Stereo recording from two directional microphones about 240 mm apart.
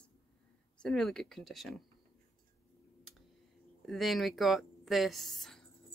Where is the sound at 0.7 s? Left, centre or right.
Centre.